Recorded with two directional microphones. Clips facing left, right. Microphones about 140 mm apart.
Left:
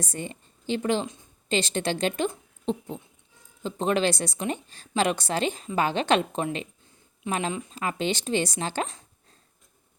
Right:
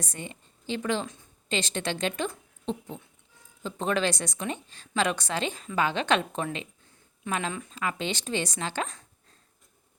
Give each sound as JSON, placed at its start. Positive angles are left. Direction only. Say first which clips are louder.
{"t": 0.0, "sound": "a woman's voice", "louder": "left 5 dB", "side_deg": 35}